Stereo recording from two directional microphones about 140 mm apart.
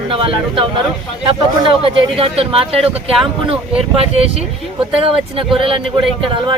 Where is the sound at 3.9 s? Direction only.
45° right (ahead or behind).